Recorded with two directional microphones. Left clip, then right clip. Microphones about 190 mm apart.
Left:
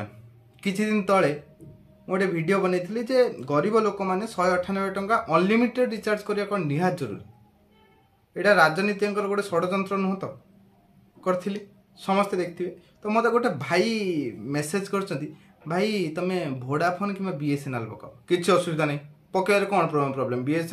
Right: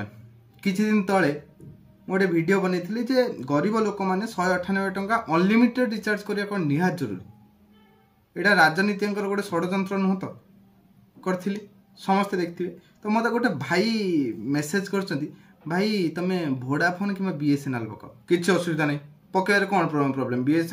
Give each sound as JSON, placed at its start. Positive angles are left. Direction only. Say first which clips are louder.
{"t": 0.6, "sound": "a man's voice", "louder": "right 1 dB", "side_deg": 20}
{"t": 8.5, "sound": "a man's voice", "louder": "even", "side_deg": 20}